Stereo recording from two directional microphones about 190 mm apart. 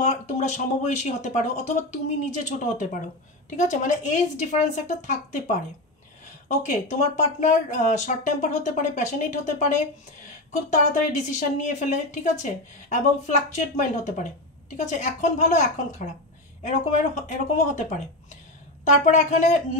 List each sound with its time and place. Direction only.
0.0 s speech: 40° left (ahead or behind)
6.6 s speech: 40° left (ahead or behind)